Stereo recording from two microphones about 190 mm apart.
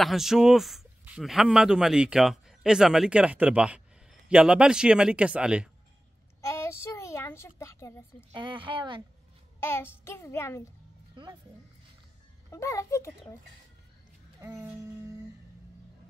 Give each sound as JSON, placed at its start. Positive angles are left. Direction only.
{"t": 0.0, "sound": "speech", "side_deg": 0}
{"t": 6.4, "sound": "child singing", "side_deg": 15}
{"t": 8.3, "sound": "speech", "side_deg": -25}
{"t": 9.6, "sound": "child singing", "side_deg": 10}
{"t": 10.0, "sound": "a child's voice", "side_deg": 15}
{"t": 11.2, "sound": "speech", "side_deg": -25}
{"t": 12.4, "sound": "a child's voice", "side_deg": 15}
{"t": 14.4, "sound": "music", "side_deg": -15}